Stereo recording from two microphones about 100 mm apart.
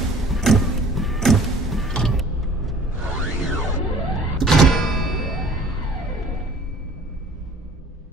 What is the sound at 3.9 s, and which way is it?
Power windows, centre (ahead or behind).